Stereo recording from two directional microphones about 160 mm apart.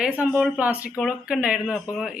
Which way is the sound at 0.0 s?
10° right (ahead or behind).